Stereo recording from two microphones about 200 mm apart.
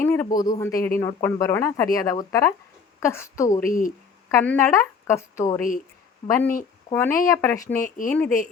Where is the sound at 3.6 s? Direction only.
45° left (ahead or behind).